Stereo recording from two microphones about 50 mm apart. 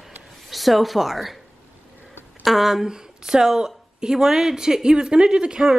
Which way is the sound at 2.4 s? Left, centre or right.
Centre.